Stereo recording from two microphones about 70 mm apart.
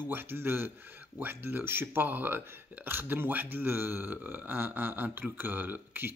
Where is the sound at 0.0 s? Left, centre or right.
Right.